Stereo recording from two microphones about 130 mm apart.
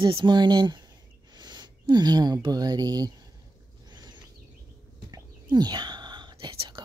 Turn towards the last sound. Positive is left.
turn(degrees=-45)  # may be behind; listen again after turning